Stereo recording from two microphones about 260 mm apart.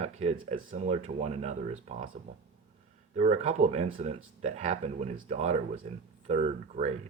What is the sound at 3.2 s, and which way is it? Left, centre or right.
Speech, right.